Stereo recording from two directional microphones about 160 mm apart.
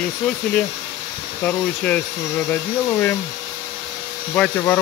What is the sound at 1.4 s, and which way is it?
Speech, 10° left (ahead or behind).